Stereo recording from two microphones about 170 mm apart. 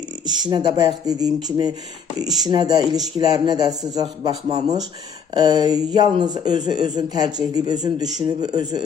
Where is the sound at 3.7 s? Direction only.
Centre (ahead or behind).